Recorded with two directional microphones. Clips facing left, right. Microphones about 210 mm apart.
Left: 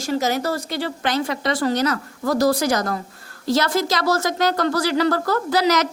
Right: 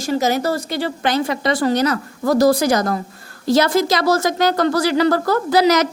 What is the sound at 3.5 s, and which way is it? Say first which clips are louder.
A woman's voice: right 5 dB; 15° right (ahead or behind).